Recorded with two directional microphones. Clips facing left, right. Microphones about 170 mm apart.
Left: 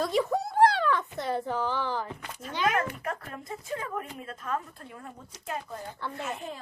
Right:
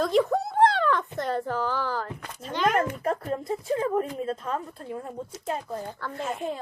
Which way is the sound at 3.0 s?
30° right (ahead or behind).